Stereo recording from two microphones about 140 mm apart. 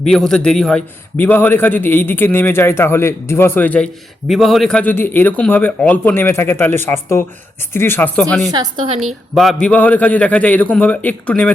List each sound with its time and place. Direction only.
0.1 s a man's voice: 5° left (ahead or behind)
4.3 s a man's voice: centre (ahead or behind)